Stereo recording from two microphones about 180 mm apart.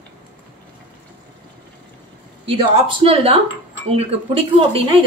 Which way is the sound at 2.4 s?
30° right (ahead or behind).